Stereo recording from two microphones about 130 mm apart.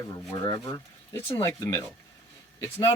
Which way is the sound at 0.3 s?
30° left (ahead or behind).